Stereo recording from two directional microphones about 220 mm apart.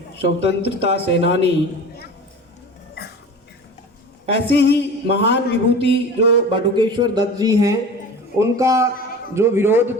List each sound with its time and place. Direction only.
0.2 s a man's voice: 50° left (ahead or behind)
4.3 s a man's voice: 50° left (ahead or behind)
6.5 s speech: 20° right (ahead or behind)